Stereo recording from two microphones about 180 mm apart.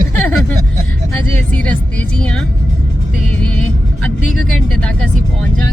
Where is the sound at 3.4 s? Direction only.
5° left (ahead or behind).